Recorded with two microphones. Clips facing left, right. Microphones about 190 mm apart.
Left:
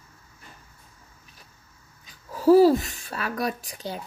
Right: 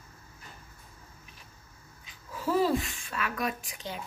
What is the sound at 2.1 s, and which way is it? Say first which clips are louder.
A woman's voice: left 13 dB; 40° left (ahead or behind).